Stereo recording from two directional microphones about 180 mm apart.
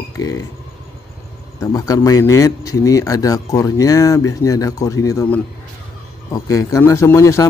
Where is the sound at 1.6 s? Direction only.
20° left (ahead or behind).